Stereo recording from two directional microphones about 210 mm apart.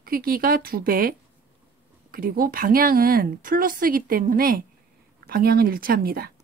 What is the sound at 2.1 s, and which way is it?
Speech, 45° right (ahead or behind).